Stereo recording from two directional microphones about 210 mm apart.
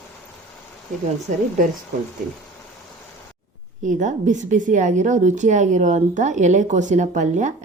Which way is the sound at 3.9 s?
35° right (ahead or behind).